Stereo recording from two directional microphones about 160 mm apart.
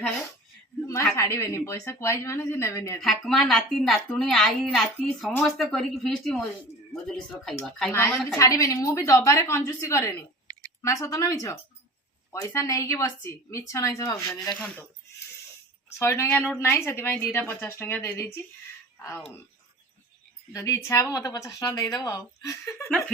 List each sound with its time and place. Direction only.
1.1 s speech: 15° left (ahead or behind)
3.0 s a woman's voice: centre (ahead or behind)
7.6 s a woman's voice: 5° left (ahead or behind)
7.9 s a woman's voice: 15° left (ahead or behind)
14.5 s speech: 10° left (ahead or behind)
16.0 s speech: 15° left (ahead or behind)
20.5 s a woman's voice: 20° left (ahead or behind)
22.9 s speech: 5° left (ahead or behind)